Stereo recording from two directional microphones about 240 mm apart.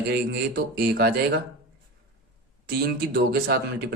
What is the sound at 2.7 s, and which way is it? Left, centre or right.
Speech, right.